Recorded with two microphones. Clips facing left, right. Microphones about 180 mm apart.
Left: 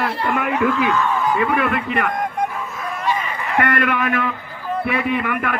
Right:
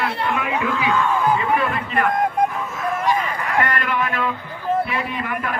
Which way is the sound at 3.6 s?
60° left (ahead or behind).